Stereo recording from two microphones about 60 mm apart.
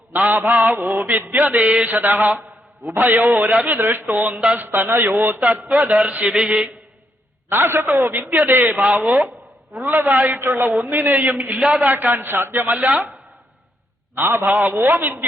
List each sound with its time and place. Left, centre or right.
0.1 s mantra: right
3.5 s speech: right
3.8 s mantra: right
5.4 s speech: right
5.6 s mantra: centre
6.1 s mantra: right
7.5 s mantra: right
9.8 s mantra: right
11.6 s mantra: centre
11.9 s mantra: right
12.7 s speech: centre
14.2 s mantra: right
14.4 s mantra: right